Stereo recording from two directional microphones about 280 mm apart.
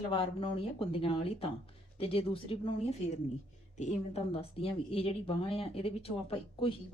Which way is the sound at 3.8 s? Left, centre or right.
Left.